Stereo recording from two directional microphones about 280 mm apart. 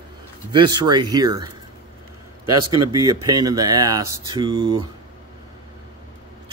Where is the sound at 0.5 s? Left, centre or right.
Centre.